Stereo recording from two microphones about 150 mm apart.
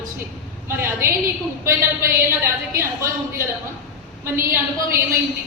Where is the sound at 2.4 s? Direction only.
15° right (ahead or behind).